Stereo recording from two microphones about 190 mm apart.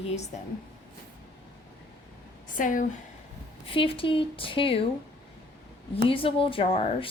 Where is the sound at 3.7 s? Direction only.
30° left (ahead or behind).